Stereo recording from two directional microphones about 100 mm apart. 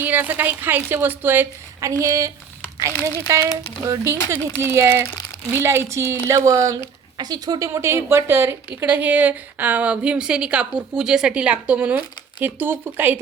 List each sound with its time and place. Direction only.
0.0 s a woman's voice: 20° right (ahead or behind)
1.8 s a woman's voice: 35° right (ahead or behind)